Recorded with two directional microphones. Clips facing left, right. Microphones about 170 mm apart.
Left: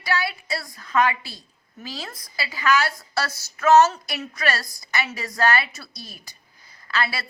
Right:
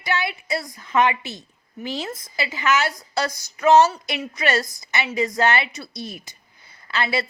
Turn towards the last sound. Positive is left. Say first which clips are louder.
# right 3 dB
turn(degrees=-20)  # may be behind; listen again after turning